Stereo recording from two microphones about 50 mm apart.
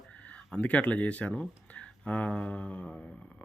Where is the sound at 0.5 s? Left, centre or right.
Left.